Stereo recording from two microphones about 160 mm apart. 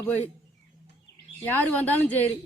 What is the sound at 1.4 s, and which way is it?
Speech, 10° left (ahead or behind).